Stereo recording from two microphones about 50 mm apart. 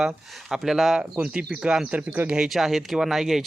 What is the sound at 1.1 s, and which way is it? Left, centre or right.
Speech, right.